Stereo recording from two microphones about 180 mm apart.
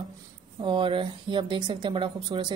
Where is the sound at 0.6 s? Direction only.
25° right (ahead or behind).